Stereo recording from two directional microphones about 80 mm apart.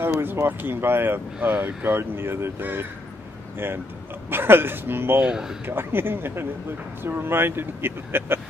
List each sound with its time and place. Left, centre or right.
0.2 s speech: right
5.2 s speech: centre
5.7 s speech: right